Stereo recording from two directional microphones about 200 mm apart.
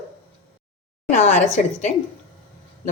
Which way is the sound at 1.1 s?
35° left (ahead or behind).